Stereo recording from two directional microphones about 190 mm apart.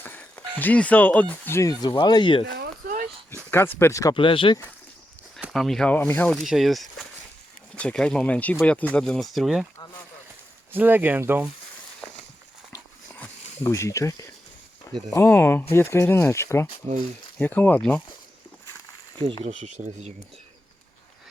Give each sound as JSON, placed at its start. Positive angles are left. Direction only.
{"t": 0.0, "sound": "music", "side_deg": 10}
{"t": 0.6, "sound": "speech", "side_deg": 5}
{"t": 2.5, "sound": "a sound", "side_deg": -50}
{"t": 3.5, "sound": "speech", "side_deg": 10}
{"t": 4.1, "sound": "speech", "side_deg": 25}
{"t": 5.4, "sound": "speech", "side_deg": 0}
{"t": 10.7, "sound": "speech", "side_deg": -10}
{"t": 12.7, "sound": "dog", "side_deg": 10}
{"t": 13.7, "sound": "speech", "side_deg": 15}
{"t": 19.6, "sound": "speech", "side_deg": -40}